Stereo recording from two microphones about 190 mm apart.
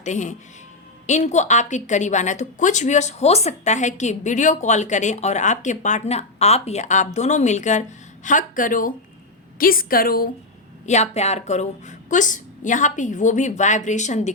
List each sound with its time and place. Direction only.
0.0 s a woman's voice: 40° left (ahead or behind)
10.8 s a woman's voice: 35° left (ahead or behind)